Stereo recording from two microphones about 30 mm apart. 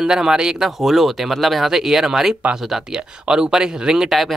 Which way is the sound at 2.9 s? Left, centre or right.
Right.